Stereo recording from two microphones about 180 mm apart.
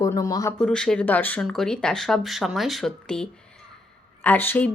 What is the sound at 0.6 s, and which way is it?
Speech, 5° left (ahead or behind).